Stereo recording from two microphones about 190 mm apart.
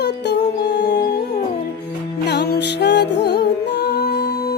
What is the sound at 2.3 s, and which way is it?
Music, 60° left (ahead or behind).